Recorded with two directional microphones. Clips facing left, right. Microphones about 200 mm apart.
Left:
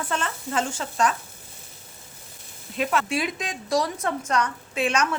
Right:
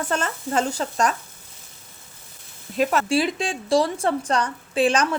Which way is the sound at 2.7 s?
40° right (ahead or behind).